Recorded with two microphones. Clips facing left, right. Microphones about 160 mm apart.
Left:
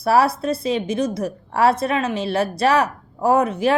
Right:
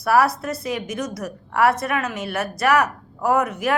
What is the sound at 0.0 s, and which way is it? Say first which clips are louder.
A woman's voice: left 1 dB; 25° left (ahead or behind).